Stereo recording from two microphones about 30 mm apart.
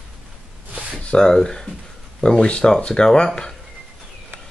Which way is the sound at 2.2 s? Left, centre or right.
Left.